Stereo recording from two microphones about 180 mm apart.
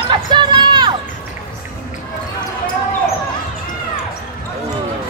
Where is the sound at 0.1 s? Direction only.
25° right (ahead or behind).